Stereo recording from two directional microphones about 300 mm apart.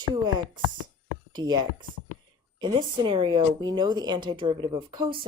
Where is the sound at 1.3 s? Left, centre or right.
Centre.